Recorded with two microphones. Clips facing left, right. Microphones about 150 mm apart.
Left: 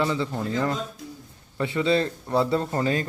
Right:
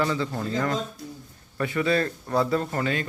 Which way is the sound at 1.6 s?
20° left (ahead or behind).